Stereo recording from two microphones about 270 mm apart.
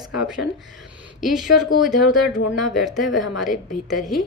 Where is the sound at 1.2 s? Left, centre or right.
Centre.